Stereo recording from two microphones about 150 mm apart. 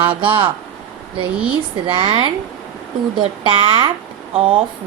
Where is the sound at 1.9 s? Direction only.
35° right (ahead or behind).